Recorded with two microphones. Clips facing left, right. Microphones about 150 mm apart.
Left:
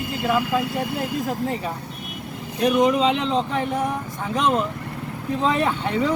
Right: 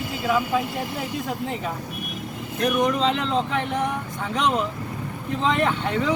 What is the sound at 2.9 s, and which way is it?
Speech, 5° left (ahead or behind).